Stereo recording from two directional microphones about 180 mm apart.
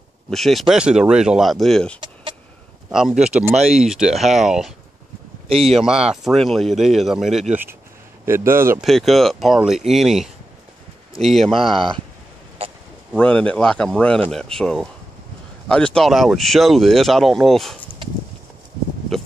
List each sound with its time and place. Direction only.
0.3 s speech: centre (ahead or behind)
5.5 s speech: 30° right (ahead or behind)
5.9 s speech: 5° right (ahead or behind)
8.3 s speech: 15° right (ahead or behind)
8.8 s speech: centre (ahead or behind)
13.1 s speech: 5° left (ahead or behind)
19.1 s a sound: centre (ahead or behind)